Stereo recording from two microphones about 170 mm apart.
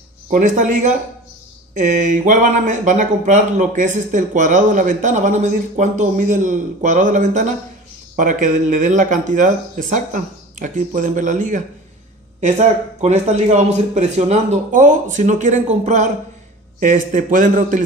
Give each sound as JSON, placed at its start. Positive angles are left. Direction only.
{"t": 0.3, "sound": "speech", "side_deg": -50}